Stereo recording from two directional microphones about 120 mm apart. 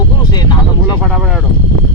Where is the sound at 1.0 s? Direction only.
5° right (ahead or behind).